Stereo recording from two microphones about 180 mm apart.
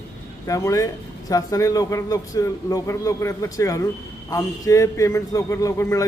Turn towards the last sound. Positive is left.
turn(degrees=15)  # may be behind; listen again after turning